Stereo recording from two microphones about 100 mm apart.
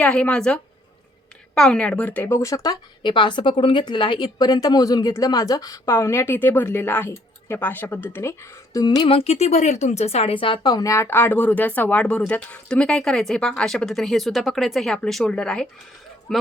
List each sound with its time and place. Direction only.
0.0 s speech: 10° left (ahead or behind); by 2.7 s 30° left (ahead or behind)
3.0 s a woman's voice: 50° left (ahead or behind); by 8.8 s 25° left (ahead or behind)
9.0 s a woman's voice: 85° left; by 16.4 s centre (ahead or behind)